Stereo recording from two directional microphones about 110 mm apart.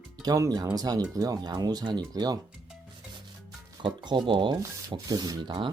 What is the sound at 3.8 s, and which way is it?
Speech, 40° right (ahead or behind).